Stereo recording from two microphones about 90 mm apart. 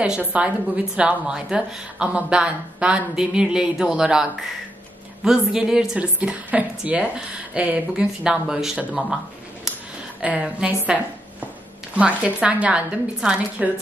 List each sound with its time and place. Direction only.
0.2 s speech: 15° right (ahead or behind)
6.1 s speech: 15° right (ahead or behind)
10.2 s speech: 10° right (ahead or behind)